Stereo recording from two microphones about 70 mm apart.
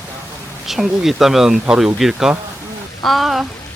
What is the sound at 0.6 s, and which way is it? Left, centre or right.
Speech, centre.